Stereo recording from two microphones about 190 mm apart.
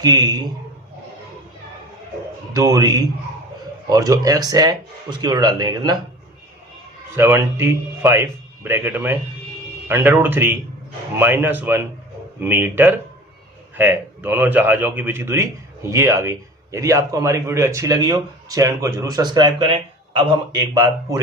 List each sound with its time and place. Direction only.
0.0 s speech: 20° right (ahead or behind)
2.5 s speech: 20° right (ahead or behind)
7.2 s a man's voice: 15° right (ahead or behind)